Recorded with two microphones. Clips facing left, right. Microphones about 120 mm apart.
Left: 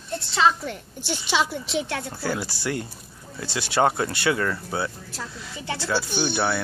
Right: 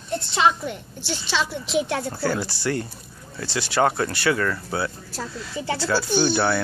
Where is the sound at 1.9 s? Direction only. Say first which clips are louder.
Right 4 dB; 30° right (ahead or behind).